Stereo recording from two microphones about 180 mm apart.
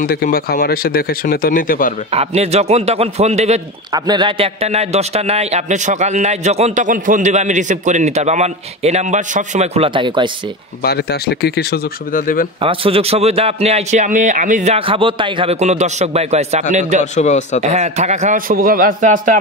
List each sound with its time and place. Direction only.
0.0 s speech: 55° left (ahead or behind)
2.1 s a man's voice: 35° right (ahead or behind)
3.9 s a man's voice: 25° right (ahead or behind)
10.8 s speech: 65° left (ahead or behind)
12.6 s a man's voice: 30° right (ahead or behind)
17.0 s speech: 40° left (ahead or behind)
17.6 s a man's voice: 40° right (ahead or behind)